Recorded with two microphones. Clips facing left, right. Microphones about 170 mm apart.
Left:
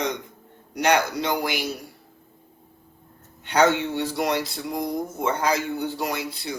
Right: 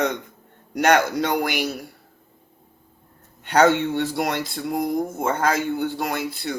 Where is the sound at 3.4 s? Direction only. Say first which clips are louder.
Right 2 dB; 50° right (ahead or behind).